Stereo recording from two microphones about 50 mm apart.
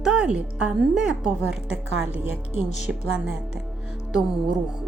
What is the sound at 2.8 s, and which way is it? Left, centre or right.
Speech, centre.